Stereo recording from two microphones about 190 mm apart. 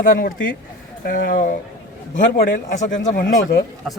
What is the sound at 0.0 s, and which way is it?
A man's voice, 45° left (ahead or behind).